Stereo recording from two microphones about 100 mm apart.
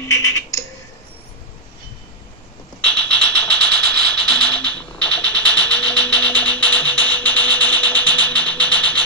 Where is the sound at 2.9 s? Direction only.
10° left (ahead or behind).